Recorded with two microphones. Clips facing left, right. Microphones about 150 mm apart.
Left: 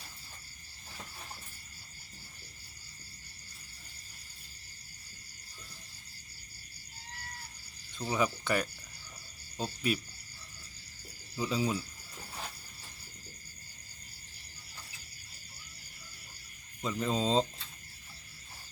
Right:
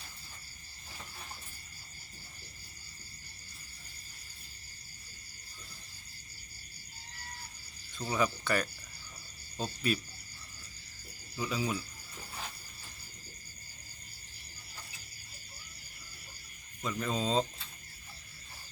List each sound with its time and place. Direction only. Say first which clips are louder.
7.9 s speech: even; 15° left (ahead or behind)
11.3 s speech: left 2 dB; 25° left (ahead or behind)
16.8 s speech: left 2 dB; 20° left (ahead or behind)